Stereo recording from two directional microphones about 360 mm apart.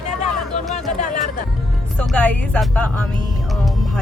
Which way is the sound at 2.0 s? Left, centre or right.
Centre.